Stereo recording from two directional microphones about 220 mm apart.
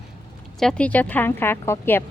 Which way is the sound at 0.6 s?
5° left (ahead or behind).